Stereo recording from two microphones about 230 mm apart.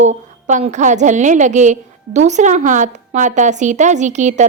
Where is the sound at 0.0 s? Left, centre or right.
Right.